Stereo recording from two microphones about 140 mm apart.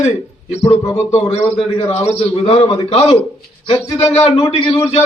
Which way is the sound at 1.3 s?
50° left (ahead or behind).